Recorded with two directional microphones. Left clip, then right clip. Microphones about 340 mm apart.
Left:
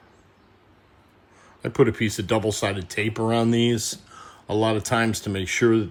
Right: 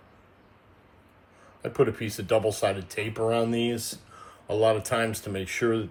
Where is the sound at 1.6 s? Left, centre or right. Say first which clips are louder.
Left 5 dB; centre.